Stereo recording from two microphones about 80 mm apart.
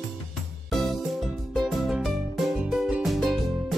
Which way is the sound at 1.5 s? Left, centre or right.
Centre.